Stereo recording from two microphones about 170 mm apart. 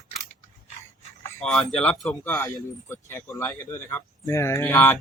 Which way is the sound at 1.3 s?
5° left (ahead or behind).